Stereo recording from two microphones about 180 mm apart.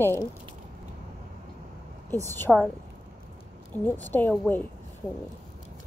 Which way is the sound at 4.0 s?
10° left (ahead or behind).